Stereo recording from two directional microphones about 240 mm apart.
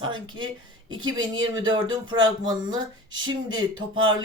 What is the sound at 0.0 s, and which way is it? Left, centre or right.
Speech, centre.